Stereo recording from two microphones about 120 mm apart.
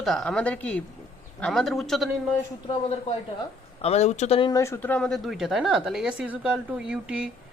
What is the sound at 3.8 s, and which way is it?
Speech, 60° left (ahead or behind).